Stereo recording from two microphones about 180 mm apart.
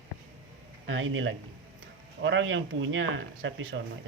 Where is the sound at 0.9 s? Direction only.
90° right.